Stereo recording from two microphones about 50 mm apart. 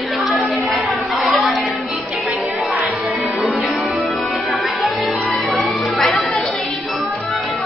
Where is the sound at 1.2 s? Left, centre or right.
Centre.